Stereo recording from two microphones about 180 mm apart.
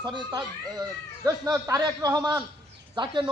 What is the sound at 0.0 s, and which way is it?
A man's voice, 25° right (ahead or behind).